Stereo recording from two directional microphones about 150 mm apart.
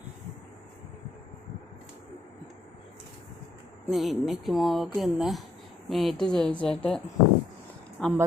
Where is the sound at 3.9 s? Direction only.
Centre (ahead or behind).